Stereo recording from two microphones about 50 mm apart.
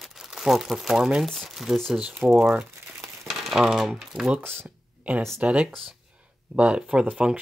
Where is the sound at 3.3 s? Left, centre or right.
Centre.